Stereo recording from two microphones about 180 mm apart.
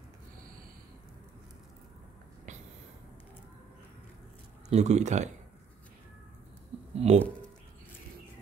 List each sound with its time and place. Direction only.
4.6 s speech: 40° right (ahead or behind)
7.0 s speech: 35° right (ahead or behind)